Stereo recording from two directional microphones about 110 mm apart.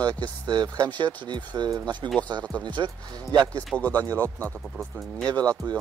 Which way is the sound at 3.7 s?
15° left (ahead or behind).